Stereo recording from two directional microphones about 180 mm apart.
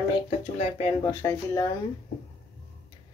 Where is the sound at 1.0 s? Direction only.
15° left (ahead or behind).